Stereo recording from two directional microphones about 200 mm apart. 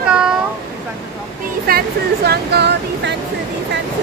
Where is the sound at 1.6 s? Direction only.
50° right (ahead or behind).